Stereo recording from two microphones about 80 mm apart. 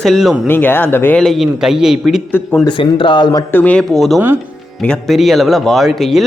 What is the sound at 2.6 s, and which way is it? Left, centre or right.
Speech, left.